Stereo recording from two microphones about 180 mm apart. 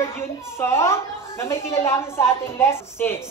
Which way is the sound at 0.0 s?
15° left (ahead or behind).